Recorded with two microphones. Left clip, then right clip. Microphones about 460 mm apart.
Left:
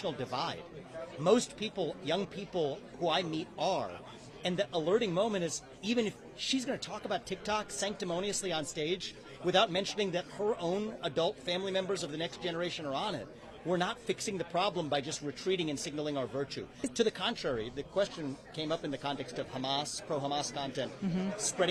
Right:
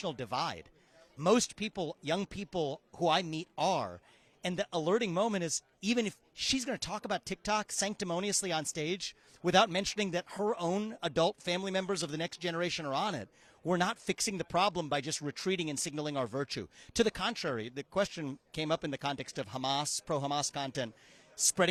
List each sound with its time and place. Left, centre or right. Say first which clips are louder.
0.0 s a man's voice: even; right